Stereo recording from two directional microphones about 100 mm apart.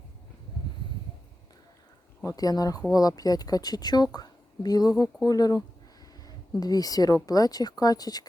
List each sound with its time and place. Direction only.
2.2 s a woman's voice: 40° left (ahead or behind)